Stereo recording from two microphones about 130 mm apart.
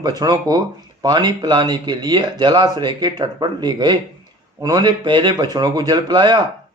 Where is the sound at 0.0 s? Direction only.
30° right (ahead or behind).